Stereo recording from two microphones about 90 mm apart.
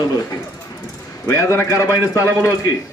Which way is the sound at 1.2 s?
35° left (ahead or behind).